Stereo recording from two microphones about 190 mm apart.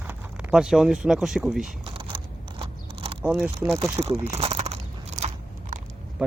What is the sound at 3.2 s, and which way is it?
Speech, 5° right (ahead or behind).